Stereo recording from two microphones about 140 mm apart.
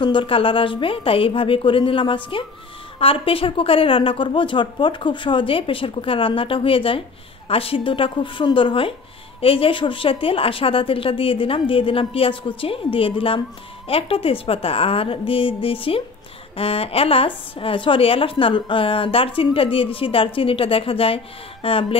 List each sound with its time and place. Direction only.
0.0 s a woman's voice: 35° left (ahead or behind)